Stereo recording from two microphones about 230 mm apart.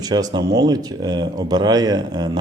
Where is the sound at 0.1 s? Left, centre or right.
Centre.